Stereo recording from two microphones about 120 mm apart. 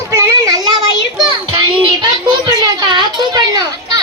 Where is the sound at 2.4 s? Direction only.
35° right (ahead or behind).